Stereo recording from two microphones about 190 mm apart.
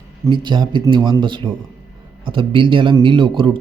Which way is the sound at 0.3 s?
25° right (ahead or behind).